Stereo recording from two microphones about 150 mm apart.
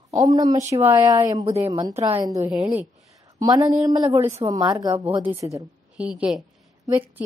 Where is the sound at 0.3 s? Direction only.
25° right (ahead or behind).